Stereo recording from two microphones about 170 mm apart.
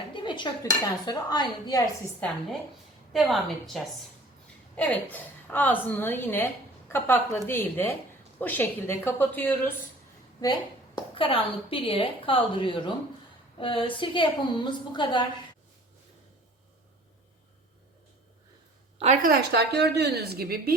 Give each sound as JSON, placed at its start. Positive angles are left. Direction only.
{"t": 0.1, "sound": "dishes", "side_deg": 30}
{"t": 2.2, "sound": "a woman's voice", "side_deg": 10}
{"t": 10.4, "sound": "a woman's voice", "side_deg": 25}
{"t": 13.6, "sound": "dishes", "side_deg": 30}
{"t": 18.9, "sound": "a woman's voice", "side_deg": -45}
{"t": 19.3, "sound": "a woman's voice", "side_deg": -70}